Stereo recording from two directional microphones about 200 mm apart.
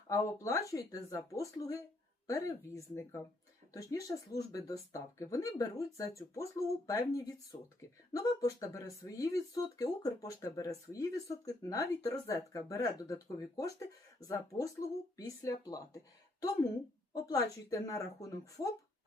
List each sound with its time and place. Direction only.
0.1 s speech: 15° left (ahead or behind)
17.2 s speech: 15° left (ahead or behind)